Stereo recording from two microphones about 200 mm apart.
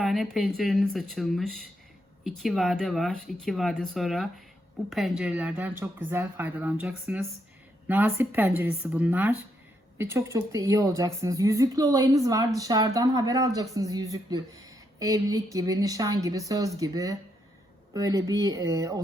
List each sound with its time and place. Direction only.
0.0 s speech: centre (ahead or behind); by 19.0 s 15° right (ahead or behind)